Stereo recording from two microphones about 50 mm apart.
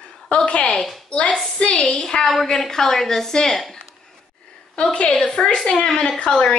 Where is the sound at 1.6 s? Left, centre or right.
Left.